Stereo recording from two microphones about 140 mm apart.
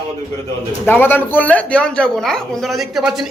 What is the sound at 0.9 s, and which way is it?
Speech, 15° left (ahead or behind).